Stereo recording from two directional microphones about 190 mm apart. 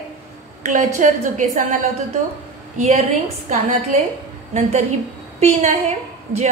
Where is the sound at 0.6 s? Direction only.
40° right (ahead or behind).